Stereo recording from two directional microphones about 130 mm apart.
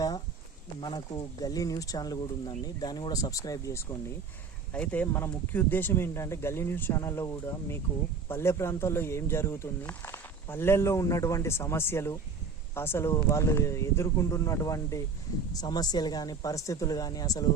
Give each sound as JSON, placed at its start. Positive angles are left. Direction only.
{"t": 0.8, "sound": "speech", "side_deg": 35}
{"t": 4.7, "sound": "speech", "side_deg": 10}